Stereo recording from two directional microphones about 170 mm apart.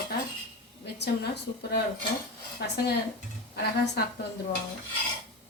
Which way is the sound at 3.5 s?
70° left (ahead or behind).